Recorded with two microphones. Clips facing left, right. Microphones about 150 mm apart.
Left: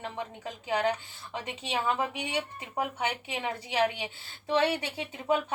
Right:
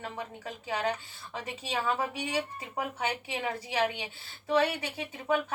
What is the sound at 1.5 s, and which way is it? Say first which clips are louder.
Speech: left 1 dB; 25° left (ahead or behind).